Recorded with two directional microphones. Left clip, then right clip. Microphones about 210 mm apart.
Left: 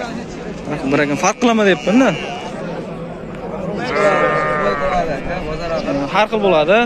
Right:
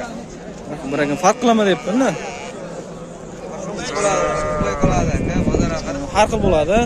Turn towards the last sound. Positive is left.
turn(degrees=-5)  # may be behind; listen again after turning